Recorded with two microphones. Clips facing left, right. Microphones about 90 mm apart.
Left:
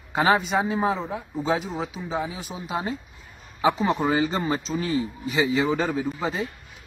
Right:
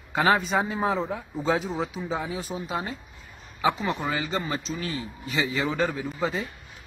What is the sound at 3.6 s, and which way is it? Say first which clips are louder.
Speech: left 4 dB; 25° left (ahead or behind).